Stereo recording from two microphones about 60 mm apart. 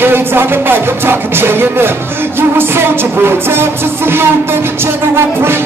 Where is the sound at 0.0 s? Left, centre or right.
Right.